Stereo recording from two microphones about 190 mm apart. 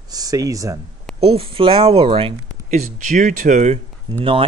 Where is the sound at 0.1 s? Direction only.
20° right (ahead or behind).